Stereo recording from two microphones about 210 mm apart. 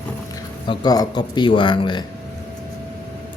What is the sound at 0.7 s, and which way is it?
Speech, 20° left (ahead or behind).